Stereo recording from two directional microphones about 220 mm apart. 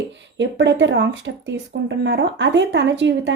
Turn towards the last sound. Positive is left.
turn(degrees=-55)  # may be behind; listen again after turning